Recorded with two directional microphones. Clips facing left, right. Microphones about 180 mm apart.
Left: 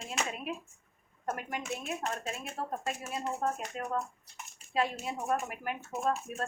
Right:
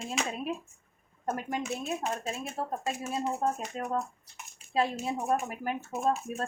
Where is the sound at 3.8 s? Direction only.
35° right (ahead or behind).